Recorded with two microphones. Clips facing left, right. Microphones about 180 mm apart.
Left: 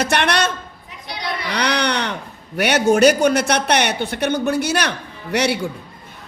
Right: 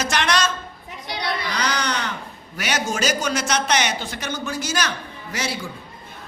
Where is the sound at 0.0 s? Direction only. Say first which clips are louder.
Left 3 dB; 60° left (ahead or behind).